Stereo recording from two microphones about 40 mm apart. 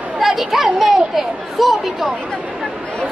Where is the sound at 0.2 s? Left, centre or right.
Centre.